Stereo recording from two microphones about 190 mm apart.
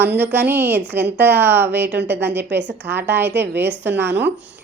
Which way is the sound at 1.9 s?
65° right (ahead or behind).